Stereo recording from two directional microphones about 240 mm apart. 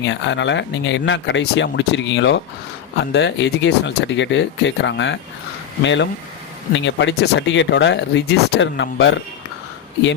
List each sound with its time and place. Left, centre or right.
0.0 s speech: left